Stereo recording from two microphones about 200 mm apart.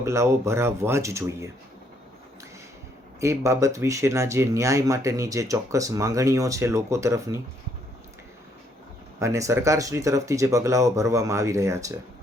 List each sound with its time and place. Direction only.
0.0 s speech: 15° right (ahead or behind)
3.2 s speech: 15° right (ahead or behind)
9.1 s speech: 15° right (ahead or behind)